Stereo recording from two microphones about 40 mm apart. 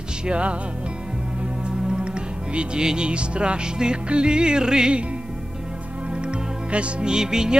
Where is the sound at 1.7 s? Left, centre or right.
Centre.